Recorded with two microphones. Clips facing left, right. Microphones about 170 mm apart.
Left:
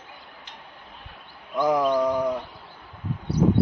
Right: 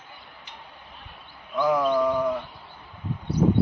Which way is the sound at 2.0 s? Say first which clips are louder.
Even; 20° left (ahead or behind).